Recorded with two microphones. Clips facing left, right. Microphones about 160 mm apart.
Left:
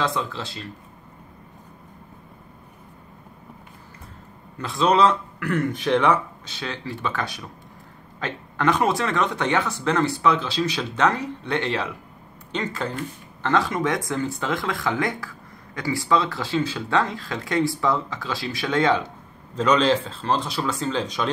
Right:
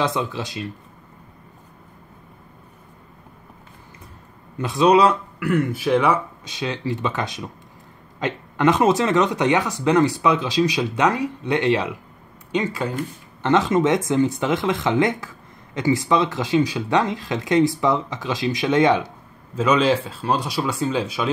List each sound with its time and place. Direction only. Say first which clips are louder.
0.0 s speech: right 3 dB; 15° right (ahead or behind)
4.6 s speech: right 4 dB; 20° right (ahead or behind)
19.5 s speech: right 1 dB; 5° right (ahead or behind)